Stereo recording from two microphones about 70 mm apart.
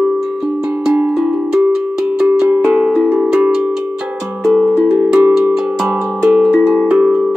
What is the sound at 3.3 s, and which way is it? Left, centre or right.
Cowbell, centre.